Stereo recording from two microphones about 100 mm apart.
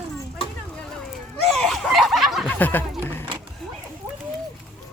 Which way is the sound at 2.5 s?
20° left (ahead or behind).